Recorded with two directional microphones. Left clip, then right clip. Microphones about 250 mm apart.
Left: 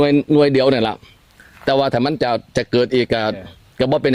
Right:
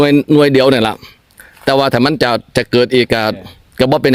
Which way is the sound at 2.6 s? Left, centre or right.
Right.